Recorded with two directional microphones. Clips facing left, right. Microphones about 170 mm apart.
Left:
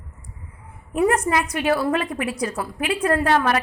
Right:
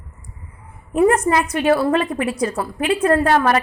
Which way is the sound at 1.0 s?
5° left (ahead or behind).